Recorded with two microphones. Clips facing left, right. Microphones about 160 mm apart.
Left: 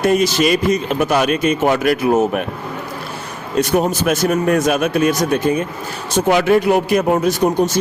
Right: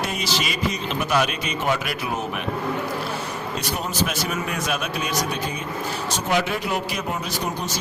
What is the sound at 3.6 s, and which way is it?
Speech, 50° left (ahead or behind).